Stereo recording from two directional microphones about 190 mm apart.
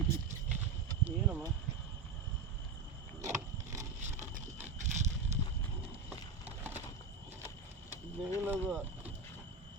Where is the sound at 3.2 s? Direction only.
40° right (ahead or behind).